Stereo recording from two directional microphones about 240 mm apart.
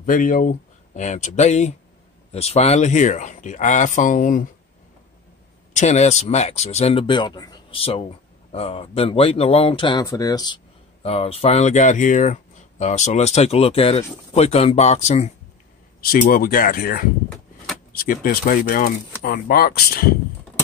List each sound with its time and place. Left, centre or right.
0.0 s speech: left
5.7 s speech: left